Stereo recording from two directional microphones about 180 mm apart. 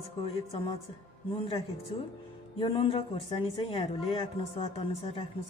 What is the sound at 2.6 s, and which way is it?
Speech, 30° left (ahead or behind).